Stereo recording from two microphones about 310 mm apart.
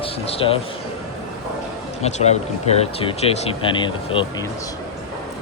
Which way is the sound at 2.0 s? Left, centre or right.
Left.